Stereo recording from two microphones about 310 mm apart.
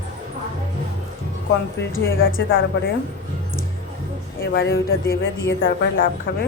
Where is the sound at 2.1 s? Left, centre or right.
Left.